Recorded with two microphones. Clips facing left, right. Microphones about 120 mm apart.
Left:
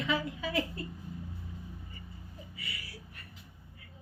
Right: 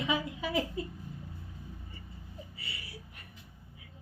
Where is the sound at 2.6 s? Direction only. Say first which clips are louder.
Left 1 dB; 25° right (ahead or behind).